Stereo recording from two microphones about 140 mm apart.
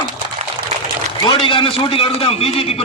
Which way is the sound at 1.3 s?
40° left (ahead or behind).